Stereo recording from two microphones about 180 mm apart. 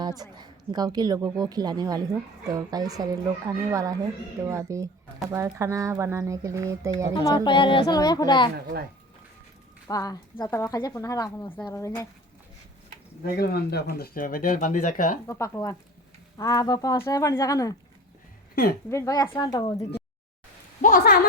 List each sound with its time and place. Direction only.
0.0 s a woman's voice: 25° right (ahead or behind)
7.1 s speech: 25° left (ahead or behind)
9.8 s a woman's voice: 20° left (ahead or behind)
13.2 s speech: 55° left (ahead or behind)
15.3 s speech: 15° left (ahead or behind)
18.5 s a woman's voice: 55° left (ahead or behind)
18.9 s speech: 15° left (ahead or behind)
20.8 s a sound: 50° left (ahead or behind)